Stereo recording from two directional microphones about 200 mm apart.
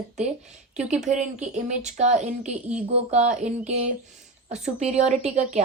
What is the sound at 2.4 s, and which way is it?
Speech, 5° right (ahead or behind).